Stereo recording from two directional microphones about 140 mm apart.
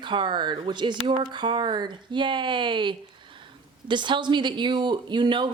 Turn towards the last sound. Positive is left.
turn(degrees=-35)  # may be behind; listen again after turning